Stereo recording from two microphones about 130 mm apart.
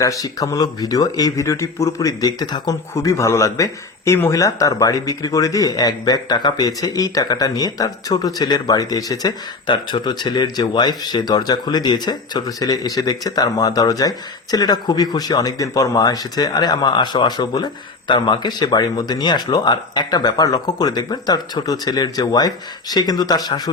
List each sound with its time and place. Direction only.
0.0 s speech: 25° left (ahead or behind)